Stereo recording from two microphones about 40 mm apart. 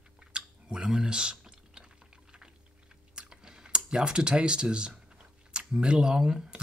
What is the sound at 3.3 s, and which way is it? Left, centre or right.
Chewing, centre.